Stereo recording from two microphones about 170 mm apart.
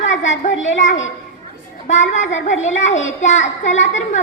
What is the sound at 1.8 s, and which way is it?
A child's voice, 45° left (ahead or behind).